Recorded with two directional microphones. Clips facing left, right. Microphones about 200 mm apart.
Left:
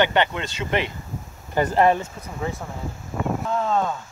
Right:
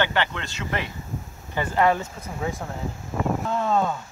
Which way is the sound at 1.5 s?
40° left (ahead or behind).